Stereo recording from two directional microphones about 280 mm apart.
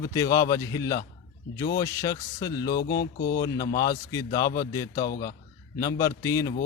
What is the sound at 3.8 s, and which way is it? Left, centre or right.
Speech, centre.